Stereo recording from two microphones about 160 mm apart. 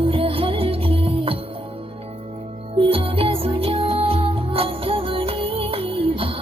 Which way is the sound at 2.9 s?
35° right (ahead or behind).